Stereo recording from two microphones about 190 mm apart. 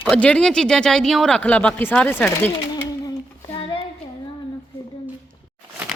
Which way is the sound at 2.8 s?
20° left (ahead or behind).